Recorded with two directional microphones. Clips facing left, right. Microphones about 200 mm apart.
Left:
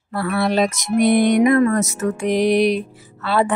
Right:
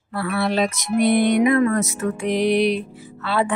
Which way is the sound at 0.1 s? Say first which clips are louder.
Left 3 dB; 40° left (ahead or behind).